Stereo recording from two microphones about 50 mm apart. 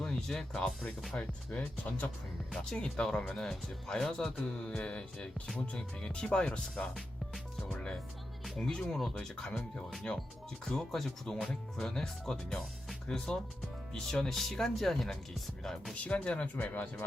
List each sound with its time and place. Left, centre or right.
0.0 s speech: centre
1.1 s speech: left
2.5 s speech: centre
6.9 s music: centre
8.5 s speech: centre
10.7 s speech: centre
16.0 s speech: left